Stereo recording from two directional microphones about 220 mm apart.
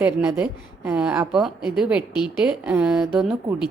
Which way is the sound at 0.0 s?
5° right (ahead or behind).